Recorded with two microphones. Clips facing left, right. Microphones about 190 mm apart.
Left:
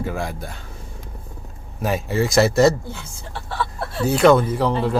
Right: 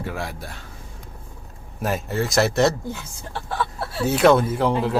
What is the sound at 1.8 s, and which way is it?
Speech, centre (ahead or behind).